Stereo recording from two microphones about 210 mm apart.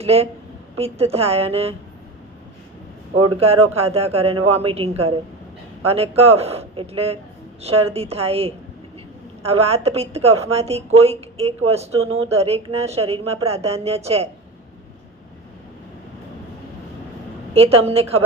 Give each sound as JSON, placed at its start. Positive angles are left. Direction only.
{"t": 0.0, "sound": "a woman's voice", "side_deg": -30}
{"t": 3.4, "sound": "a woman's voice", "side_deg": -30}
{"t": 17.5, "sound": "a woman's voice", "side_deg": -30}